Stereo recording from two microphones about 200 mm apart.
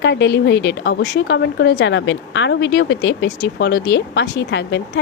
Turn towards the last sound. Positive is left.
turn(degrees=60)  # may be behind; listen again after turning